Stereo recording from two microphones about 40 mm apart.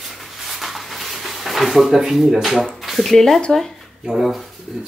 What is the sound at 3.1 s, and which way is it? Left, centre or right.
Speech, centre.